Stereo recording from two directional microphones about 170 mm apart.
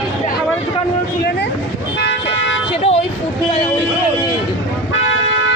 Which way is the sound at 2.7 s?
35° left (ahead or behind).